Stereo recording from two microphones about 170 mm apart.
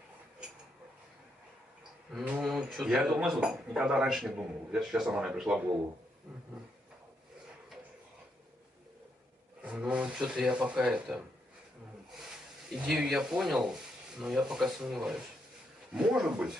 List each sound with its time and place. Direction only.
2.1 s speech: 5° right (ahead or behind)
9.6 s speech: 5° right (ahead or behind)
12.7 s speech: 5° right (ahead or behind)